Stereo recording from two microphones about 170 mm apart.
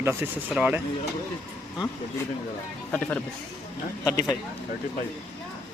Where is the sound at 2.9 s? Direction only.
10° left (ahead or behind).